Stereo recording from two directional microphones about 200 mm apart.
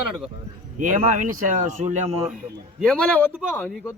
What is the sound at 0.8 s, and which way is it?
Speech, 40° right (ahead or behind).